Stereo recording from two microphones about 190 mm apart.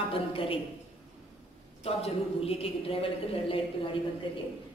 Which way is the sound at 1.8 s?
30° left (ahead or behind).